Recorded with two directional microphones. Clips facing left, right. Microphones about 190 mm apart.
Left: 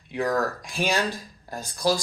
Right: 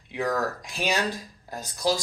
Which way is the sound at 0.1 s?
20° right (ahead or behind).